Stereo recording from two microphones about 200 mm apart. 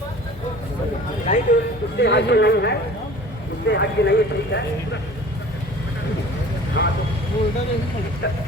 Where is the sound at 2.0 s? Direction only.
60° left (ahead or behind).